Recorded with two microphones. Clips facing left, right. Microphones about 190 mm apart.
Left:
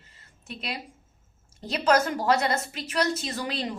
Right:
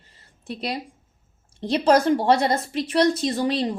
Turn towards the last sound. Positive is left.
turn(degrees=-30)  # may be behind; listen again after turning